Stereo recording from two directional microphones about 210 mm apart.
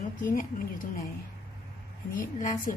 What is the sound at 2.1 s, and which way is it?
Speech, 40° left (ahead or behind).